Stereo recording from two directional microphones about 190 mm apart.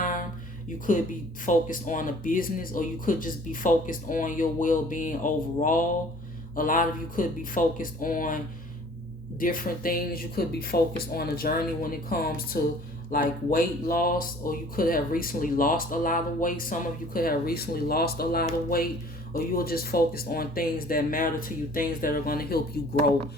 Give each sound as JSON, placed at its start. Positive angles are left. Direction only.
{"t": 0.0, "sound": "music", "side_deg": 45}
{"t": 0.9, "sound": "speech", "side_deg": 45}
{"t": 9.4, "sound": "speech", "side_deg": 45}